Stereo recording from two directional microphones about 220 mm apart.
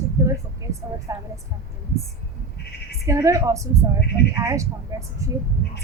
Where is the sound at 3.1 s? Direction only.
15° right (ahead or behind).